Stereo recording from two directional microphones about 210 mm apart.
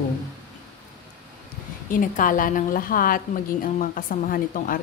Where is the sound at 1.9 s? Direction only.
40° left (ahead or behind).